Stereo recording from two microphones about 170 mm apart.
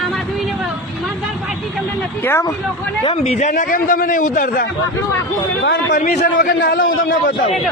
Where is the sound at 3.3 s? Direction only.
50° left (ahead or behind).